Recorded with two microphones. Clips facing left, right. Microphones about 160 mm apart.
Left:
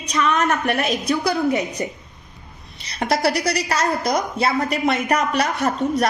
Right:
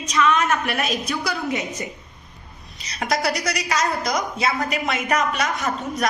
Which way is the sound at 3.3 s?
30° left (ahead or behind).